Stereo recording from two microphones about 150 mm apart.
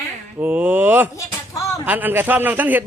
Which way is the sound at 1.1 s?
20° left (ahead or behind).